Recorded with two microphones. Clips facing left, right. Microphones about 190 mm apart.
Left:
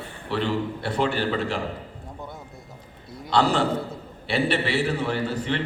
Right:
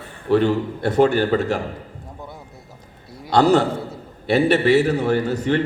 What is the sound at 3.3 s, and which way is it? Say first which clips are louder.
A man's voice: right 6 dB; 45° right (ahead or behind).